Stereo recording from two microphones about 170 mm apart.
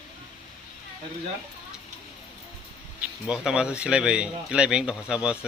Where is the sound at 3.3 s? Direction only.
5° right (ahead or behind).